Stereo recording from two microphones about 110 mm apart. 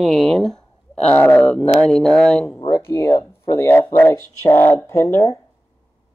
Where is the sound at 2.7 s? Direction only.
20° left (ahead or behind).